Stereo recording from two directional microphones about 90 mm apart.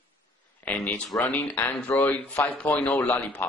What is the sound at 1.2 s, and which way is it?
A man's voice, 15° left (ahead or behind).